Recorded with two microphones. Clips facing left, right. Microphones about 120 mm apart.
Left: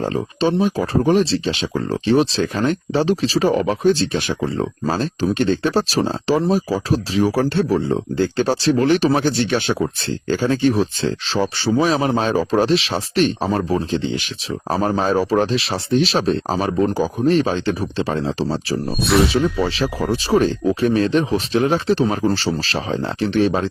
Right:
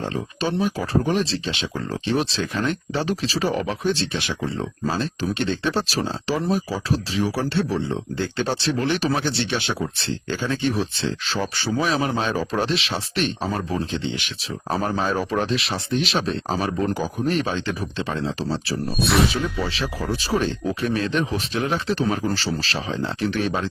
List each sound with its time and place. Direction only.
0.0 s speech: 30° left (ahead or behind)
16.6 s speech: 20° left (ahead or behind)
16.9 s speech: 35° left (ahead or behind)
18.9 s speech: centre (ahead or behind)
19.6 s speech: 40° left (ahead or behind)